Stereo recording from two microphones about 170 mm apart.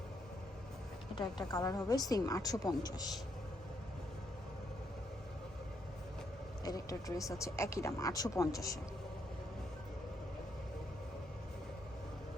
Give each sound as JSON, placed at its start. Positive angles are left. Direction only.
{"t": 1.1, "sound": "a woman's voice", "side_deg": 25}
{"t": 6.7, "sound": "a sound", "side_deg": 20}
{"t": 7.2, "sound": "a woman's voice", "side_deg": 20}